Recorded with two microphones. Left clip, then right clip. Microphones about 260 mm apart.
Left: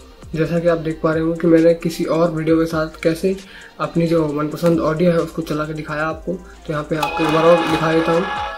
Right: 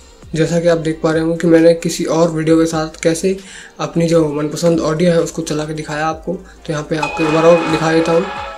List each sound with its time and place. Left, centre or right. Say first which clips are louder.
0.3 s speech: right 4 dB; centre